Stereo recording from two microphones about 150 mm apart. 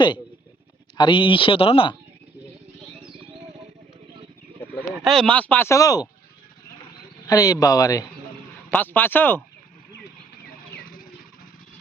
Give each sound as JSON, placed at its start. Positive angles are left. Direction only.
{"t": 0.9, "sound": "speech", "side_deg": 35}
{"t": 5.0, "sound": "speech", "side_deg": 5}
{"t": 7.3, "sound": "speech", "side_deg": 25}
{"t": 8.7, "sound": "speech", "side_deg": 10}
{"t": 10.5, "sound": "vehicle", "side_deg": 75}